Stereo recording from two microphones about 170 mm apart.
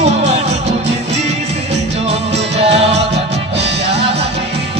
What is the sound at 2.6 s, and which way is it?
Music, 35° right (ahead or behind).